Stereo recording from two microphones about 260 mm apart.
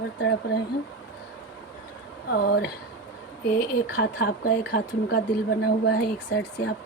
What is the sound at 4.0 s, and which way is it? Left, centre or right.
Speech, left.